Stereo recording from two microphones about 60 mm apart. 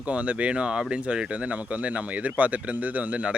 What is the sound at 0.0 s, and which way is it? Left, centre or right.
Speech, right.